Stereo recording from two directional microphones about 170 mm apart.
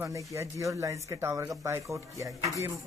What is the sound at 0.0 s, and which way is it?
Speech, 15° right (ahead or behind).